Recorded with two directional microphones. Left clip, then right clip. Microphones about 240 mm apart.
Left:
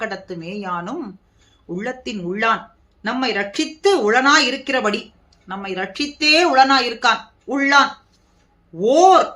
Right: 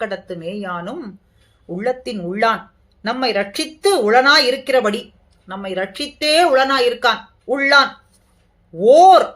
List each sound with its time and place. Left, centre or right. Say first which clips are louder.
0.0 s speech: right 3 dB; centre